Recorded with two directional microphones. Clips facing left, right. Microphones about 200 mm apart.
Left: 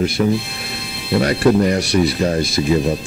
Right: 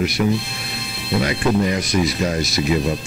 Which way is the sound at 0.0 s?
30° left (ahead or behind).